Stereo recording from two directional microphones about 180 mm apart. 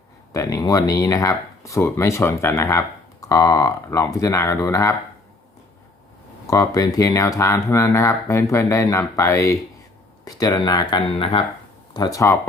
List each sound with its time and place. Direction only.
0.3 s speech: 20° left (ahead or behind)
6.5 s speech: 20° left (ahead or behind)